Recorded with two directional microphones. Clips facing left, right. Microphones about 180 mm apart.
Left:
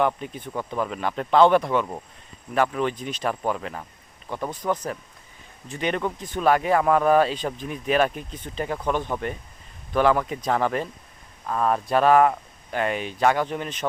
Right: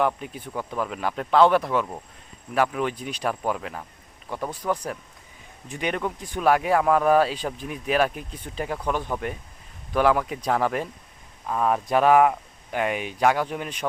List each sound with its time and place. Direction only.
0.0 s speech: 5° right (ahead or behind)
5.9 s speech: 5° right (ahead or behind)